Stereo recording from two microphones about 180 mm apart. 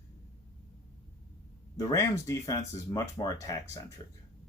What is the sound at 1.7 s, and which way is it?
Speech, 15° left (ahead or behind).